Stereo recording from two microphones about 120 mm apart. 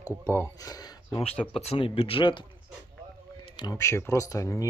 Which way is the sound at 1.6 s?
50° left (ahead or behind).